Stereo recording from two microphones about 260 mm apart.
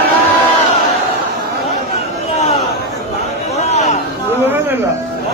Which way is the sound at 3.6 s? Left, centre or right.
Left.